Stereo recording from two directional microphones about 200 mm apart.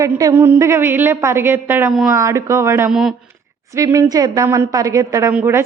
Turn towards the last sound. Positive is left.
turn(degrees=-10)  # may be behind; listen again after turning